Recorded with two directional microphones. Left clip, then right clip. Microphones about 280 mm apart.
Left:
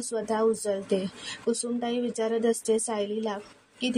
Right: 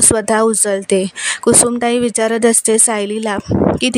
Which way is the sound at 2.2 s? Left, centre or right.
Right.